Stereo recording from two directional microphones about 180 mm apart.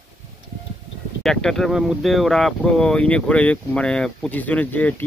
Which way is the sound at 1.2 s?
Centre (ahead or behind).